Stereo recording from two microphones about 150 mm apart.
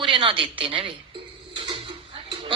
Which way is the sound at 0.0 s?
35° right (ahead or behind).